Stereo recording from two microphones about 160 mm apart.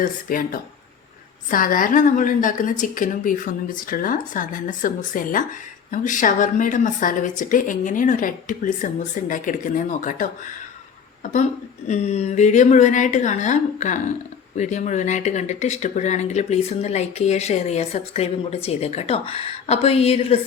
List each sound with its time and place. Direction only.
0.0 s a woman's voice: 60° left (ahead or behind); by 20.4 s 40° left (ahead or behind)